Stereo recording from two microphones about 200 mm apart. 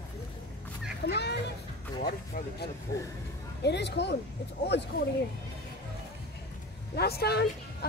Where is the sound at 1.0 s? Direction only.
55° left (ahead or behind).